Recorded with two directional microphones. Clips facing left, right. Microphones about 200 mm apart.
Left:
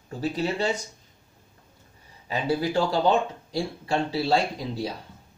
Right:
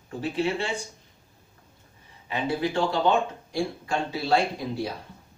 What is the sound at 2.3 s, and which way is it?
Speech, 40° left (ahead or behind).